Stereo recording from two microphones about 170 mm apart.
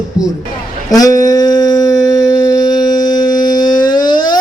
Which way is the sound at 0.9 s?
20° left (ahead or behind).